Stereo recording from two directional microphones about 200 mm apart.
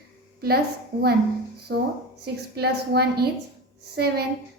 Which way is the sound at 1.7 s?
60° right (ahead or behind).